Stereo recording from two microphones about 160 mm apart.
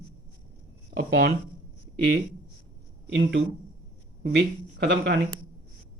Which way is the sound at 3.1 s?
90° right.